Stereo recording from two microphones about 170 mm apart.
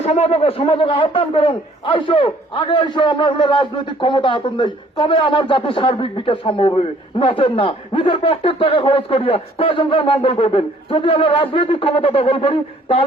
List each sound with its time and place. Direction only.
0.0 s a man's voice: 40° left (ahead or behind)